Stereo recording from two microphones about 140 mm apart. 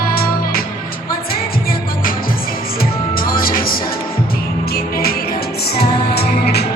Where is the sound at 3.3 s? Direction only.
90° left.